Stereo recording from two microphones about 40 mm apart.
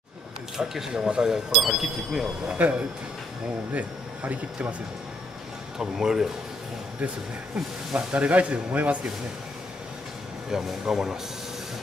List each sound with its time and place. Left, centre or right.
0.6 s speech: centre
2.4 s speech: right
3.7 s speech: right
5.8 s speech: centre
7.9 s speech: right
10.5 s speech: centre